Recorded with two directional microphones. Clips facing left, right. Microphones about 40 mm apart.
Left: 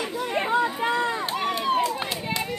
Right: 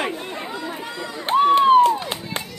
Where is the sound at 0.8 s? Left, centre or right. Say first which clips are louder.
Left 7 dB; left.